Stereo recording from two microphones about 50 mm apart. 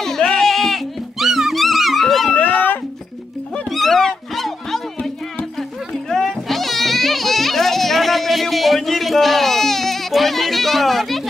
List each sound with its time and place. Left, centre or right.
0.0 s a sound: centre
1.2 s music: centre
2.3 s music: left
3.7 s cat: centre
6.0 s music: centre